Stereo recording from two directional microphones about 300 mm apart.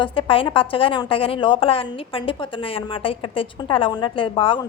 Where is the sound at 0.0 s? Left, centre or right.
Centre.